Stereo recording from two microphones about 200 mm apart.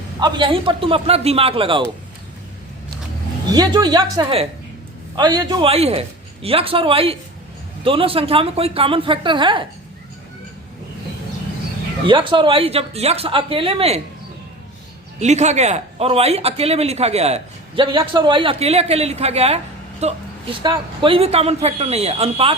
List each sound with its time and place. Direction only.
0.2 s a man's voice: 25° right (ahead or behind)
3.5 s a man's voice: 20° right (ahead or behind)
12.0 s a man's voice: 25° right (ahead or behind)
15.2 s a man's voice: 35° right (ahead or behind)